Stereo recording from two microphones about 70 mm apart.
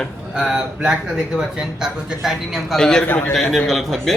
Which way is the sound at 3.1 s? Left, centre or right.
Left.